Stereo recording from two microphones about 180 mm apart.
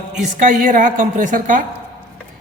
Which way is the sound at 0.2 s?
45° right (ahead or behind).